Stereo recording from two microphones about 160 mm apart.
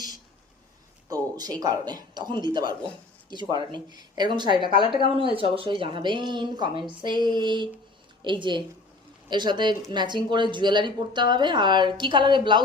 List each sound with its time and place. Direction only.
1.1 s speech: 25° right (ahead or behind)